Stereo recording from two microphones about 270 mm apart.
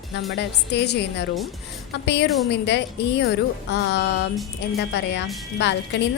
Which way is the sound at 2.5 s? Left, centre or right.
Left.